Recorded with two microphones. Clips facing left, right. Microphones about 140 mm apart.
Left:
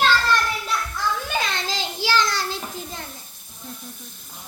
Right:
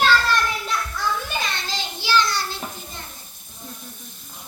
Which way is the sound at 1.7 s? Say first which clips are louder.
Right 2 dB; 90° left.